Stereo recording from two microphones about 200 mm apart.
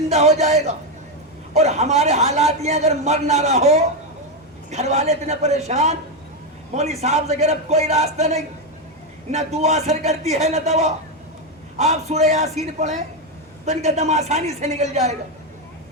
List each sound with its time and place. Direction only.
0.1 s a man's voice: 35° right (ahead or behind)